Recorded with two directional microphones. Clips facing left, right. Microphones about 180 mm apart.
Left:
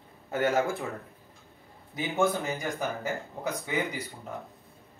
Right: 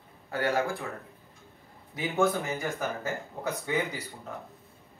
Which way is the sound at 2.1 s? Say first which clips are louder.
Even; 15° left (ahead or behind).